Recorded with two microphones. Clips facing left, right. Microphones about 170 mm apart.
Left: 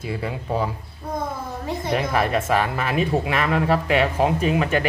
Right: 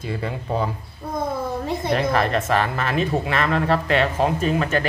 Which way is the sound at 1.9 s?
10° left (ahead or behind).